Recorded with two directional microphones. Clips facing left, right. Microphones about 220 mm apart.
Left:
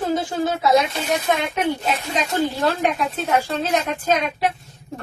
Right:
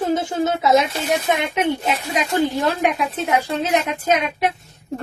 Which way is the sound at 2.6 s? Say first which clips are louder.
Right 1 dB; 15° right (ahead or behind).